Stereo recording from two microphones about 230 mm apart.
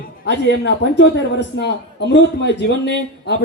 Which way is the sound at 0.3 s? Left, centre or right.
Left.